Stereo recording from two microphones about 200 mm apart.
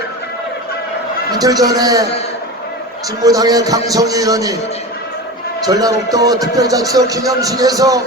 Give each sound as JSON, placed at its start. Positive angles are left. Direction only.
{"t": 1.3, "sound": "a man's voice", "side_deg": -20}
{"t": 3.2, "sound": "speech", "side_deg": -20}
{"t": 5.6, "sound": "speech", "side_deg": -20}